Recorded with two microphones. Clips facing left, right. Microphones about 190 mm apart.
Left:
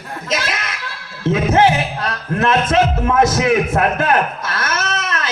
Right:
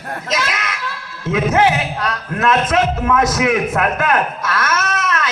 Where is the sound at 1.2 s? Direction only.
30° left (ahead or behind).